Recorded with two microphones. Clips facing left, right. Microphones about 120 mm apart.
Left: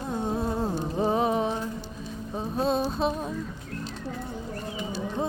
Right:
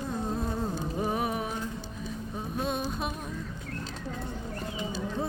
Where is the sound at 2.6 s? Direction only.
30° left (ahead or behind).